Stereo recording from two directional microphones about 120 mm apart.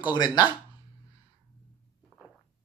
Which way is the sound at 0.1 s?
35° left (ahead or behind).